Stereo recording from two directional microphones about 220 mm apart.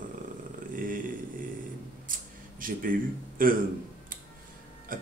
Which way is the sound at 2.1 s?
40° right (ahead or behind).